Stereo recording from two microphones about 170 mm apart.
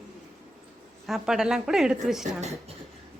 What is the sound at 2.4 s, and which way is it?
Speech, 40° right (ahead or behind).